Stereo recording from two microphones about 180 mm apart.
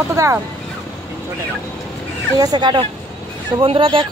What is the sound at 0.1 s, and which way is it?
Speech, 15° right (ahead or behind).